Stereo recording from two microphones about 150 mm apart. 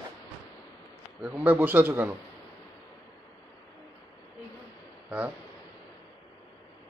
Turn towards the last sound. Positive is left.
turn(degrees=-10)  # may be behind; listen again after turning